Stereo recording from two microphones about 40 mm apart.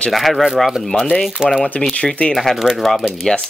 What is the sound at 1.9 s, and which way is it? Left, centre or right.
Speech, left.